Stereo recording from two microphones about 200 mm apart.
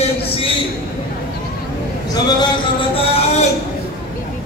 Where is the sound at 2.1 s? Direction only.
25° left (ahead or behind).